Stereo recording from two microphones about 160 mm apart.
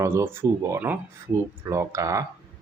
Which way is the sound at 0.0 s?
15° right (ahead or behind).